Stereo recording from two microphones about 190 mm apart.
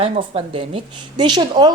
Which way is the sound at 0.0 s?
30° right (ahead or behind).